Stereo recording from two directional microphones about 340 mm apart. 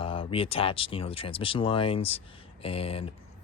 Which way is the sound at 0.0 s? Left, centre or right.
Centre.